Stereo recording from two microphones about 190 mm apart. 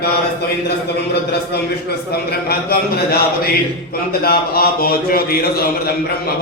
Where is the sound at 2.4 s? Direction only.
55° left (ahead or behind).